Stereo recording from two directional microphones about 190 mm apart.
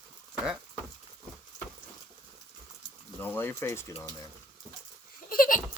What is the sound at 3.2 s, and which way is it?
Speech, 10° left (ahead or behind).